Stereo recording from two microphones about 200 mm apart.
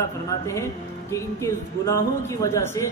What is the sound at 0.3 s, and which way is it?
Speech, 15° left (ahead or behind).